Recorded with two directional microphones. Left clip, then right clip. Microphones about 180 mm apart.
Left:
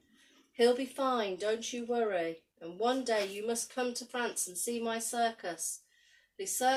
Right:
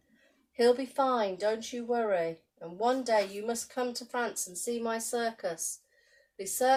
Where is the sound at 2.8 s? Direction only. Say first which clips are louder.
Right 4 dB; 25° right (ahead or behind).